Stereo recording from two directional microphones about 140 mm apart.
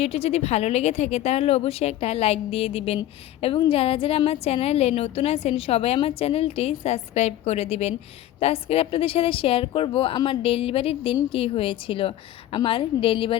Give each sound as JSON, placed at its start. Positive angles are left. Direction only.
{"t": 0.0, "sound": "a woman's voice", "side_deg": 45}